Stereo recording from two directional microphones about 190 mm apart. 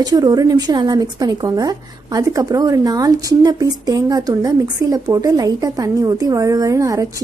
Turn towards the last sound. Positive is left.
turn(degrees=-15)  # may be behind; listen again after turning